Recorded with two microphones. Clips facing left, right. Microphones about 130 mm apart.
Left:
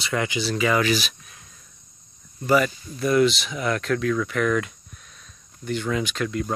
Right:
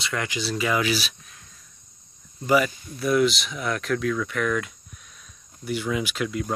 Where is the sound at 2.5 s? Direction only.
5° right (ahead or behind).